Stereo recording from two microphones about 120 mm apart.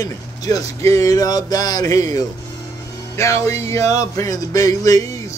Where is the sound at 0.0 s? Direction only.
30° left (ahead or behind).